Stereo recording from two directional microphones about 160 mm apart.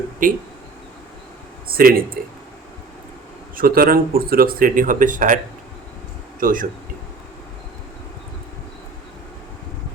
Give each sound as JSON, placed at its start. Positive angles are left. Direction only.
{"t": 0.2, "sound": "speech", "side_deg": -55}
{"t": 1.7, "sound": "speech", "side_deg": -65}
{"t": 3.5, "sound": "speech", "side_deg": -65}
{"t": 6.4, "sound": "speech", "side_deg": -60}